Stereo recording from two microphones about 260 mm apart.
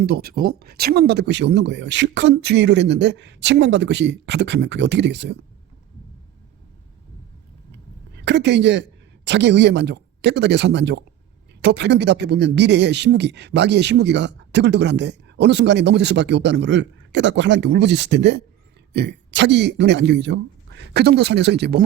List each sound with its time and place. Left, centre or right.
0.0 s speech: right
7.7 s a woman's voice: right